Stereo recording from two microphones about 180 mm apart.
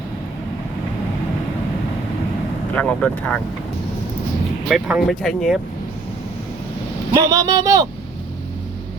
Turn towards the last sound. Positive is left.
turn(degrees=-20)  # may be behind; listen again after turning